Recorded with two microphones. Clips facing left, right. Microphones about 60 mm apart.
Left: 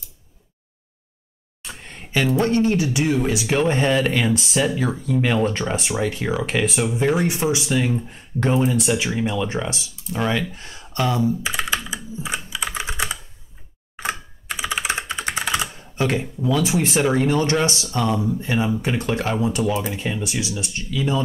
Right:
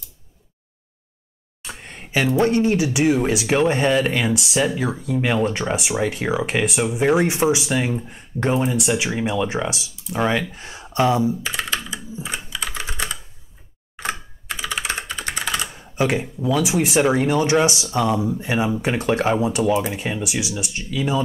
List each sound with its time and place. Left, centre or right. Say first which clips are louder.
1.6 s speech: right 1 dB; centre
11.4 s computer keyboard: left 1 dB; centre
12.4 s typing: left 2 dB; centre
13.9 s computer keyboard: even; centre
15.4 s typing: left 1 dB; centre
15.7 s speech: right 2 dB; centre